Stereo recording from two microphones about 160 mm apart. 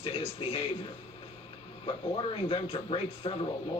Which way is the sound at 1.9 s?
35° left (ahead or behind).